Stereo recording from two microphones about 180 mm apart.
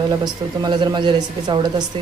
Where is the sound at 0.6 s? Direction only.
25° right (ahead or behind).